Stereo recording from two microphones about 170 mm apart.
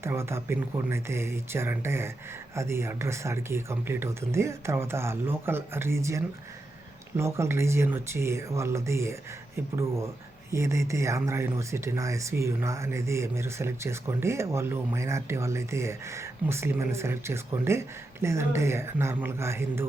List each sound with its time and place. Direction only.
0.0 s speech: 15° right (ahead or behind)